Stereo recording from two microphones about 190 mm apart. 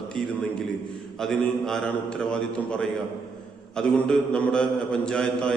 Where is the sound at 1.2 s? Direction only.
5° left (ahead or behind).